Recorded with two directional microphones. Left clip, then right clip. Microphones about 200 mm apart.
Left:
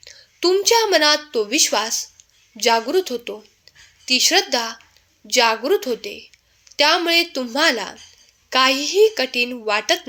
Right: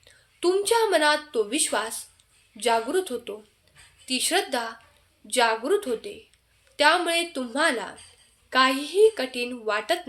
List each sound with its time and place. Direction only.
0.0 s a woman's voice: 25° left (ahead or behind)